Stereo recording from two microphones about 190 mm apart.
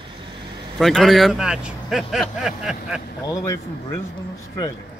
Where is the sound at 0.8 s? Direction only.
Centre (ahead or behind).